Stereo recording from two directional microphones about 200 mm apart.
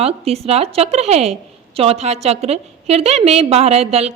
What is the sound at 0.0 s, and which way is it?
A woman's voice, 30° right (ahead or behind).